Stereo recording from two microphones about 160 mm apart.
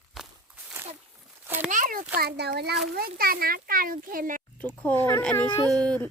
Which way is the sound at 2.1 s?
85° right.